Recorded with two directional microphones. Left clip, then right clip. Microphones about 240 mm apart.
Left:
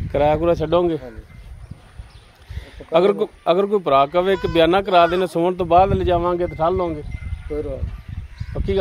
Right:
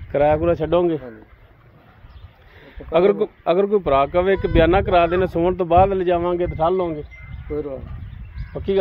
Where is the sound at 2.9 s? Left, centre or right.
Centre.